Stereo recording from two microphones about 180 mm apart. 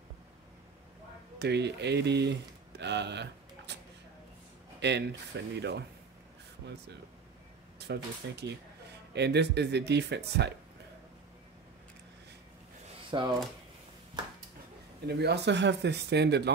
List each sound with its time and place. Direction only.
1.4 s speech: 70° right (ahead or behind)
2.8 s a sound: 70° right (ahead or behind)
4.7 s speech: 70° right (ahead or behind)
7.8 s speech: 70° right (ahead or behind)
13.1 s speech: 25° right (ahead or behind)
15.0 s speech: 65° right (ahead or behind)